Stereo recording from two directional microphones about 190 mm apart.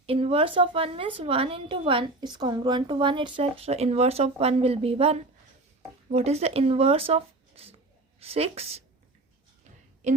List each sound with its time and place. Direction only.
0.0 s a woman's voice: 30° right (ahead or behind)